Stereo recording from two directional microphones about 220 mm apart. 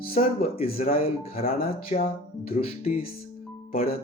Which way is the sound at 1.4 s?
40° left (ahead or behind).